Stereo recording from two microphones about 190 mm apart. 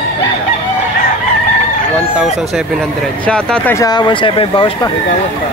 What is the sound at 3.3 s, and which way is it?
Speech, 5° left (ahead or behind).